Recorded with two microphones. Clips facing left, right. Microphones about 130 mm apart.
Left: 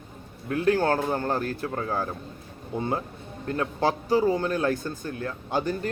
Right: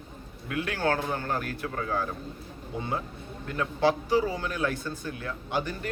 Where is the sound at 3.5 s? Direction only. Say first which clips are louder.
Even; 35° left (ahead or behind).